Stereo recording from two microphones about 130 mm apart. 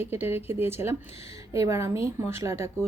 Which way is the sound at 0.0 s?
15° right (ahead or behind).